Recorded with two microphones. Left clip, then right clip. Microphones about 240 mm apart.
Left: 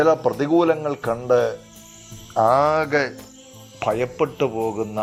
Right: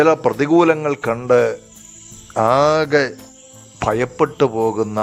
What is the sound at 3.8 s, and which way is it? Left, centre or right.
A man's voice, right.